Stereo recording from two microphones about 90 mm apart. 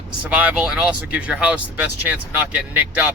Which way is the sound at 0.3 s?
15° right (ahead or behind).